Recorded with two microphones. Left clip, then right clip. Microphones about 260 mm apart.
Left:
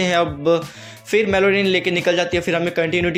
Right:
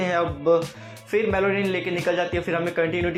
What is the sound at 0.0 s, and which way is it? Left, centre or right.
Speech, left.